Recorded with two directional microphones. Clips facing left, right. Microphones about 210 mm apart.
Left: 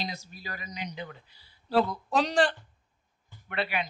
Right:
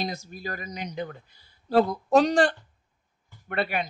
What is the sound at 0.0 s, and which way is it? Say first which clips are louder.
A woman's voice: right 6 dB; 45° right (ahead or behind).